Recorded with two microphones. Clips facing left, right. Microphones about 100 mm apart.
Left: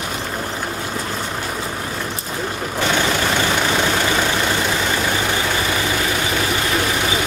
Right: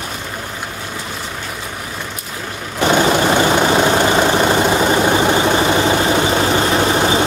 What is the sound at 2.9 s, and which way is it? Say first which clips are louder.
Vehicle: right 7 dB; 30° right (ahead or behind).